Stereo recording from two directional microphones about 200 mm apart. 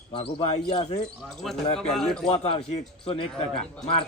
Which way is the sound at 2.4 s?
30° left (ahead or behind).